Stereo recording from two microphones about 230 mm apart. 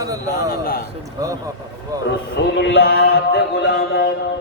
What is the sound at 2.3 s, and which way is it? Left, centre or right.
A man's voice, left.